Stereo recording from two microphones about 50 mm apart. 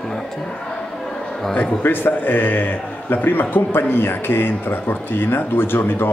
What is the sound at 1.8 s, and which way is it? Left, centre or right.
A man's voice, left.